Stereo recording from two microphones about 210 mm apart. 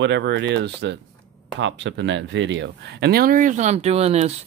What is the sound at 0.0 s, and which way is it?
Speech, 55° right (ahead or behind).